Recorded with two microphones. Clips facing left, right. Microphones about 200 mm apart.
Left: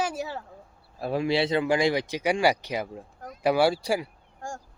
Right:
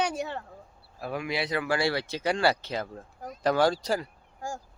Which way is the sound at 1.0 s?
30° left (ahead or behind).